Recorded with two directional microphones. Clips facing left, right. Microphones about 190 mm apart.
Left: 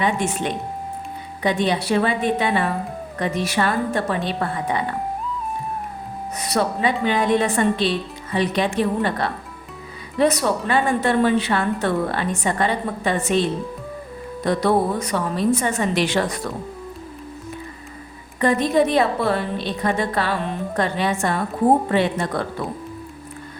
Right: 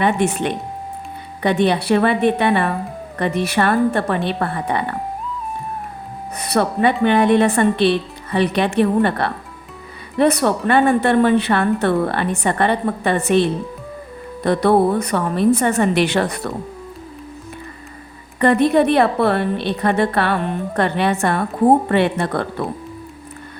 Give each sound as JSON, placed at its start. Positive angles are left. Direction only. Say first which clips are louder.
{"t": 0.0, "sound": "speech", "louder": "right 4 dB", "side_deg": -60}
{"t": 6.4, "sound": "speech", "louder": "right 4 dB", "side_deg": -55}
{"t": 14.4, "sound": "speech", "louder": "right 4 dB", "side_deg": -60}
{"t": 18.3, "sound": "speech", "louder": "right 4 dB", "side_deg": -60}